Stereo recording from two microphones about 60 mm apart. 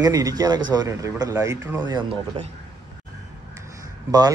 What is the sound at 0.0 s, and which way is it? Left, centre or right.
Speech, right.